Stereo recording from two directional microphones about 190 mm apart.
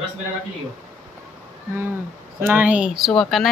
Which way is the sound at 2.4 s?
10° right (ahead or behind).